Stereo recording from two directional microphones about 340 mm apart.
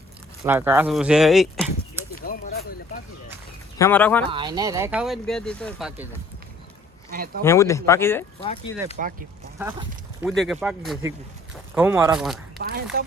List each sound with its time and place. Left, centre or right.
0.4 s speech: centre
2.1 s a sound: left
3.8 s speech: centre
4.3 s speech: centre
7.1 s speech: right
7.4 s speech: centre
9.6 s speech: centre
12.6 s speech: right